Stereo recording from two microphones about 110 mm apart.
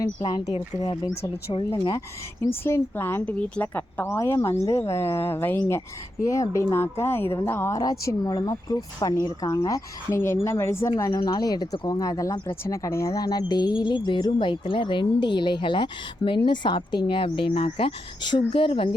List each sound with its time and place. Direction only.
0.0 s a woman's voice: 40° left (ahead or behind)
2.5 s speech: 20° left (ahead or behind)
4.0 s speech: 25° left (ahead or behind)
7.8 s a woman's voice: 35° left (ahead or behind); by 18.9 s 55° left (ahead or behind)